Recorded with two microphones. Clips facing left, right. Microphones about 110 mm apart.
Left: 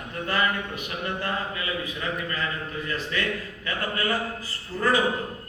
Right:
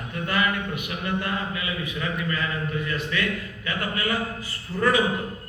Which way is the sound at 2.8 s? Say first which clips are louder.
Right 2 dB; 35° left (ahead or behind).